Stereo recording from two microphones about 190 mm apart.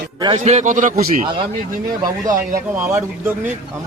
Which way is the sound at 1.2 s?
30° right (ahead or behind).